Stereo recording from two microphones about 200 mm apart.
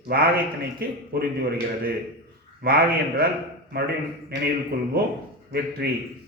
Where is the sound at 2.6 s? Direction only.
50° right (ahead or behind).